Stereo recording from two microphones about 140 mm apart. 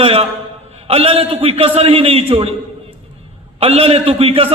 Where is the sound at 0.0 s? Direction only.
45° right (ahead or behind).